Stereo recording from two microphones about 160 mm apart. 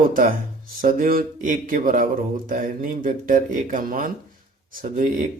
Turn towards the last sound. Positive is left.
turn(degrees=-50)  # may be behind; listen again after turning